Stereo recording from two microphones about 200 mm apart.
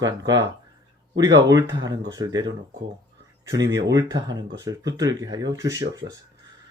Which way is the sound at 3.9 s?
20° right (ahead or behind).